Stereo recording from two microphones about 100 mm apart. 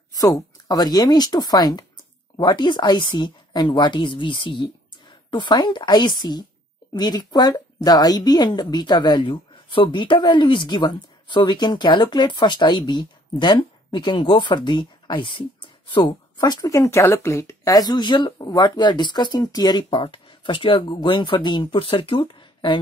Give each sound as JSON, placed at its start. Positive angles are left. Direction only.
{"t": 0.1, "sound": "a woman's voice", "side_deg": 35}